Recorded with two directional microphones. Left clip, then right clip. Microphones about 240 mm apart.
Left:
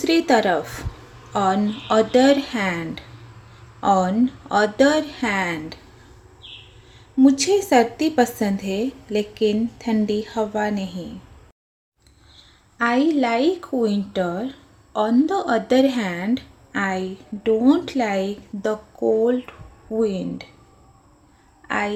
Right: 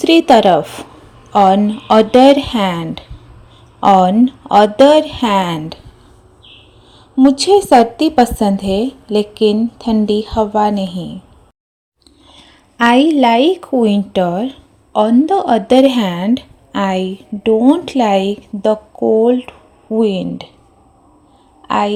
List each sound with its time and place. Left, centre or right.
0.0 s speech: right
7.2 s speech: right
12.3 s a sound: right
13.1 s speech: right
21.7 s speech: right